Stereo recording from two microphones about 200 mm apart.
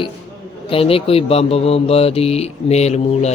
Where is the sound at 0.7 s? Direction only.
30° left (ahead or behind).